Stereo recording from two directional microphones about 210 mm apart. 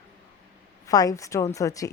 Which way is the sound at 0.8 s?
15° left (ahead or behind).